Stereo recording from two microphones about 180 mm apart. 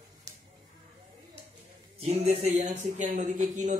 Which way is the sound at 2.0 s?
35° right (ahead or behind).